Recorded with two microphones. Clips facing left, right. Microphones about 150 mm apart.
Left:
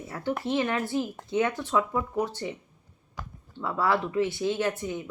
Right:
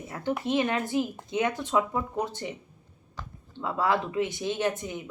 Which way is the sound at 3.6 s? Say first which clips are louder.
Even; 20° right (ahead or behind).